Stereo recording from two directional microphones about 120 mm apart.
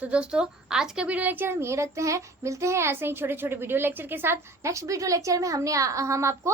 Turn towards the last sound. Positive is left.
turn(degrees=-25)  # may be behind; listen again after turning